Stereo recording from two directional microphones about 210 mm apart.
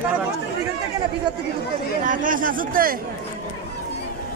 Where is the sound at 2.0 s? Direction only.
40° right (ahead or behind).